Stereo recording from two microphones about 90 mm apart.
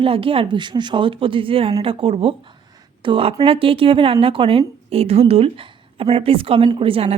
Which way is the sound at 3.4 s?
90° right.